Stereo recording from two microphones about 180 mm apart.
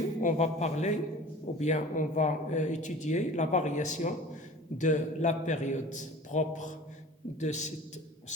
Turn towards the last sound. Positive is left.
turn(degrees=40)  # may be behind; listen again after turning